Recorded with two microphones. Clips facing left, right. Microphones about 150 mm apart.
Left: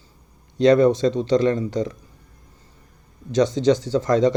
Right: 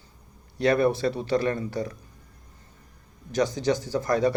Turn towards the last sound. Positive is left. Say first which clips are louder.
# left 5 dB
turn(degrees=20)  # may be behind; listen again after turning